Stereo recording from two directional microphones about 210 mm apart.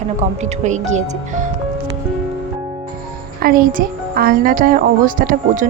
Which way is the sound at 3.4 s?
45° right (ahead or behind).